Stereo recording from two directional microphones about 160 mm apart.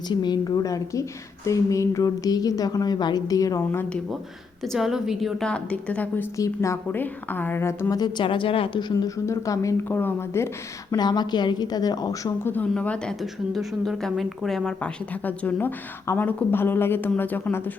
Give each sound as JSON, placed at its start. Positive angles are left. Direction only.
{"t": 0.1, "sound": "a woman's voice", "side_deg": 25}
{"t": 4.6, "sound": "a woman's voice", "side_deg": 0}
{"t": 10.9, "sound": "a woman's voice", "side_deg": 25}
{"t": 12.4, "sound": "a woman's voice", "side_deg": 10}